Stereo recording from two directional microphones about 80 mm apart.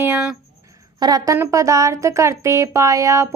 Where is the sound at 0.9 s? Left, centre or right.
Right.